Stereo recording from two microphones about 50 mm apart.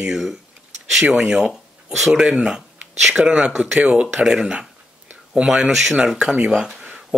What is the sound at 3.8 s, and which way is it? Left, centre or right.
Speech, right.